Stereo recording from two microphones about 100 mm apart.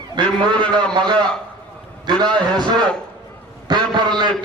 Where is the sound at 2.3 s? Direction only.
50° right (ahead or behind).